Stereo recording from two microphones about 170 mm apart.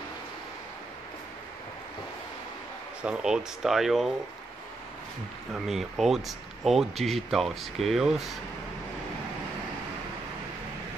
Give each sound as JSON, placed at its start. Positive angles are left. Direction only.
{"t": 3.0, "sound": "speech", "side_deg": -5}
{"t": 5.5, "sound": "speech", "side_deg": 0}